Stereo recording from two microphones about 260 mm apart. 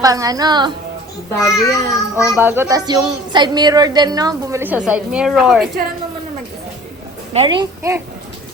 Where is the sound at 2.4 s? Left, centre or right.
Centre.